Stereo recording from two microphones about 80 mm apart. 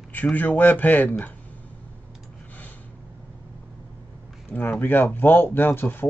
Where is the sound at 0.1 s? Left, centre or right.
Left.